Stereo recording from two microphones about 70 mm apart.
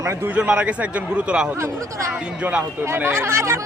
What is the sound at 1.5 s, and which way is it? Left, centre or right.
Speech, right.